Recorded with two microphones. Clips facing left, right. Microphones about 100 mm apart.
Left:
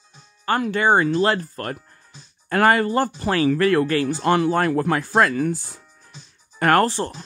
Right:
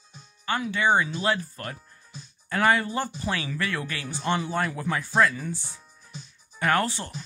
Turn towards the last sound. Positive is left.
turn(degrees=45)  # may be behind; listen again after turning